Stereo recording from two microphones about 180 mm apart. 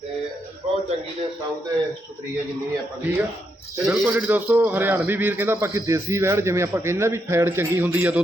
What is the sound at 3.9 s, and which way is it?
A man's voice, 10° right (ahead or behind).